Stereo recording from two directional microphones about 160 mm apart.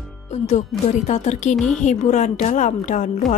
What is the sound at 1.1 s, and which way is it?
Speech, 45° left (ahead or behind).